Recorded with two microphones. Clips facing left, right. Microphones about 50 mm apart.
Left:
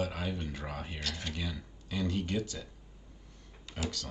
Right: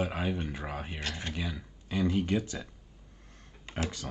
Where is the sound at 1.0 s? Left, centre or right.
Right.